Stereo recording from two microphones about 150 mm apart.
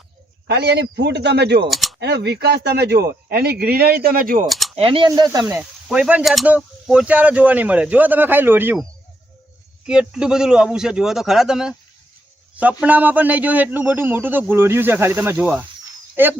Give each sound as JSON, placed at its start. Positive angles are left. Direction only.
{"t": 0.4, "sound": "a man's voice", "side_deg": -90}
{"t": 1.7, "sound": "typing", "side_deg": 0}
{"t": 2.0, "sound": "speech", "side_deg": -90}
{"t": 4.4, "sound": "speech", "side_deg": 0}
{"t": 4.7, "sound": "speech", "side_deg": -35}
{"t": 5.5, "sound": "a man's voice", "side_deg": -10}
{"t": 9.8, "sound": "a man's voice", "side_deg": -5}
{"t": 12.8, "sound": "a man's voice", "side_deg": -10}